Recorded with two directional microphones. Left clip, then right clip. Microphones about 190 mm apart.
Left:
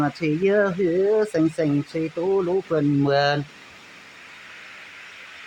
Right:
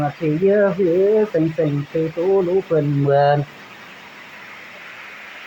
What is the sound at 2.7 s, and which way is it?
Speech, 45° left (ahead or behind).